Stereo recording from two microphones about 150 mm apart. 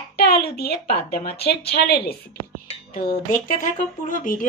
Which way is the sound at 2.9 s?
65° left (ahead or behind).